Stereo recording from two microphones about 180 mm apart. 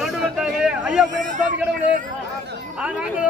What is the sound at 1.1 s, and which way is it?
Speech, 45° right (ahead or behind).